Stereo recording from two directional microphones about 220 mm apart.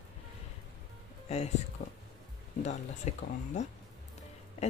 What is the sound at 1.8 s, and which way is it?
Speech, 30° left (ahead or behind).